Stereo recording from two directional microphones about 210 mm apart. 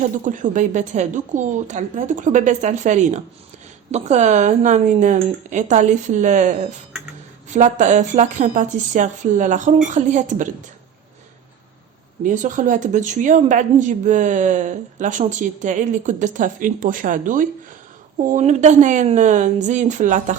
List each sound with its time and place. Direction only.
0.3 s a woman's voice: 35° right (ahead or behind)
12.2 s a woman's voice: 35° right (ahead or behind)